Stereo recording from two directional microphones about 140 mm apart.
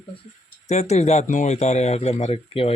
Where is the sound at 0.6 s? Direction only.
55° left (ahead or behind).